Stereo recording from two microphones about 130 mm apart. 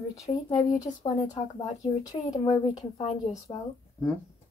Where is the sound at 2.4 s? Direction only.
65° left (ahead or behind).